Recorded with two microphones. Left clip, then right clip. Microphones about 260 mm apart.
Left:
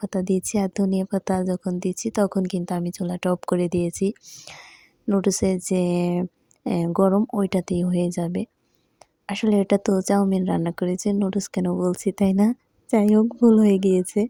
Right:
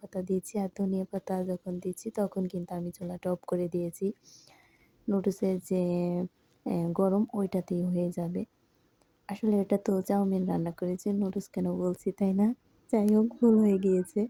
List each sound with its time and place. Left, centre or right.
0.0 s a woman's voice: left